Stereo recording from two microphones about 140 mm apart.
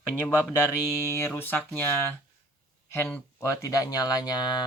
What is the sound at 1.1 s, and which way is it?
Speech, 15° left (ahead or behind).